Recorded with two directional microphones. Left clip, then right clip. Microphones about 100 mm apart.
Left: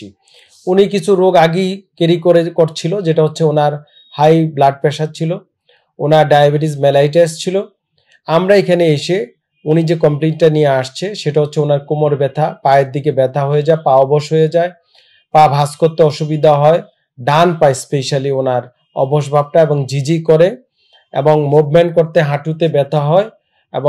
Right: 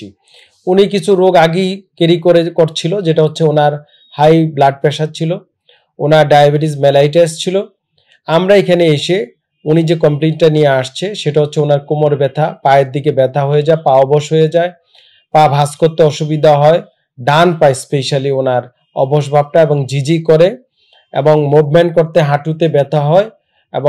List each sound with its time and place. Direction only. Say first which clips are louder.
0.0 s a man's voice: right 2 dB; 15° right (ahead or behind)
21.7 s speech: right 1 dB; 20° right (ahead or behind)